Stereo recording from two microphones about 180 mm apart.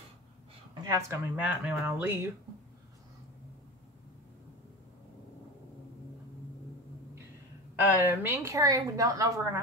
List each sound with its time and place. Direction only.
0.8 s a woman's voice: 15° right (ahead or behind)
7.8 s a woman's voice: 10° right (ahead or behind)